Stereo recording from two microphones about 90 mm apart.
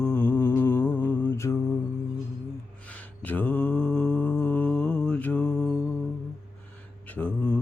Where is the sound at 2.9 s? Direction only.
15° left (ahead or behind).